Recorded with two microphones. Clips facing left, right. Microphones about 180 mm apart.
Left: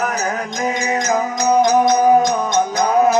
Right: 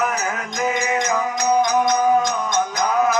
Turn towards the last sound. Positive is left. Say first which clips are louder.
# left 5 dB
turn(degrees=35)  # may be behind; listen again after turning